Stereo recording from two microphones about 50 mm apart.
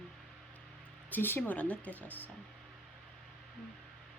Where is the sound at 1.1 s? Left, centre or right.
Left.